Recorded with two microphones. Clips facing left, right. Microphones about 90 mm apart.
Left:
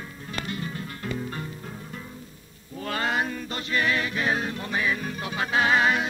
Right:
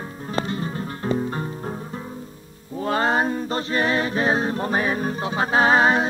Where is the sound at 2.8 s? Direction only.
30° right (ahead or behind).